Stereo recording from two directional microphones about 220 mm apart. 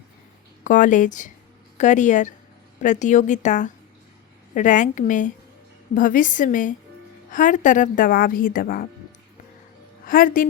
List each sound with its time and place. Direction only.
0.6 s a woman's voice: 35° left (ahead or behind)
10.1 s a woman's voice: 40° left (ahead or behind)